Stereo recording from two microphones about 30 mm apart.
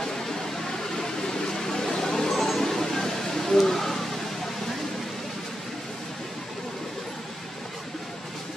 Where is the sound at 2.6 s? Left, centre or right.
Centre.